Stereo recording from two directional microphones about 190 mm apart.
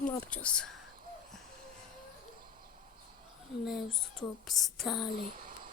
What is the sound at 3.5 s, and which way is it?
Speech, centre (ahead or behind).